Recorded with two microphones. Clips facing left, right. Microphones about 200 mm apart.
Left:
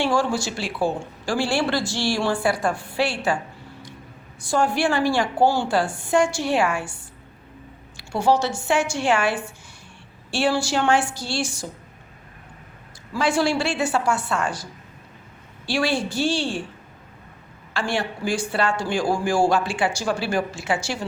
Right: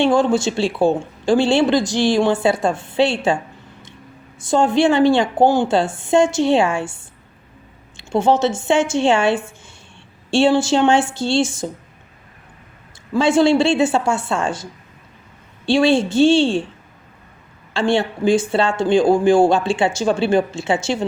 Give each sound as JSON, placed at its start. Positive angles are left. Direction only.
{"t": 0.0, "sound": "speech", "side_deg": -20}
{"t": 13.1, "sound": "speech", "side_deg": -25}
{"t": 17.7, "sound": "speech", "side_deg": -25}